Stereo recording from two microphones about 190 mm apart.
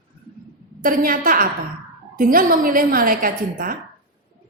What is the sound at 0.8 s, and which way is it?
A woman's voice, 45° right (ahead or behind).